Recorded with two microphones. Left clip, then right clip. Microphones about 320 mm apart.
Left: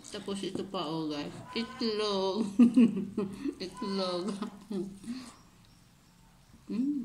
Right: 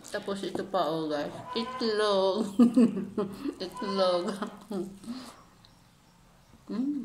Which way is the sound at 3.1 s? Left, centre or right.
Centre.